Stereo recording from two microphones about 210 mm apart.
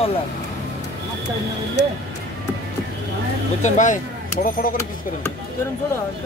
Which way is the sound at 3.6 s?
35° left (ahead or behind).